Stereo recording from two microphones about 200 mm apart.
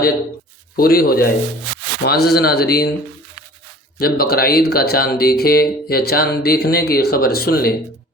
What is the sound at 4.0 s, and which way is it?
Speech, 50° left (ahead or behind).